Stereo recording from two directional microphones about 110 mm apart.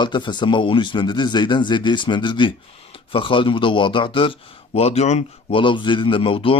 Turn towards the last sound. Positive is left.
turn(degrees=55)  # may be behind; listen again after turning